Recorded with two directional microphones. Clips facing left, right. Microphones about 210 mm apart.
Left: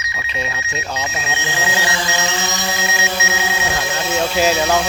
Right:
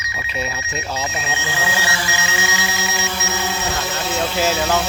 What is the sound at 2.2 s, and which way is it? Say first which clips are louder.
Music: left 2 dB; 50° left (ahead or behind).